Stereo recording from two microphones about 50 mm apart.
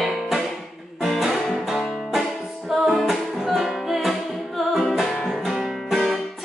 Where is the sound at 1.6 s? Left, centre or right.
Centre.